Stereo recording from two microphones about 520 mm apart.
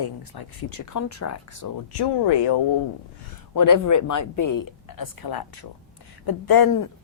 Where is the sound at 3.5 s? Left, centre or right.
Left.